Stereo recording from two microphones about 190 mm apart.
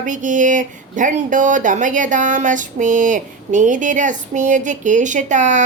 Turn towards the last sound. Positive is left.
turn(degrees=-40)  # may be behind; listen again after turning